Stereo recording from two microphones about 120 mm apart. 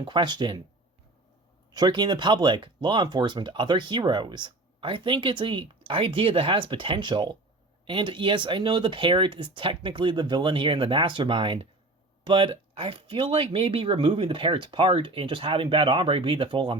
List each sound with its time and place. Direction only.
0.0 s speech: 40° right (ahead or behind)
1.7 s speech: 35° right (ahead or behind)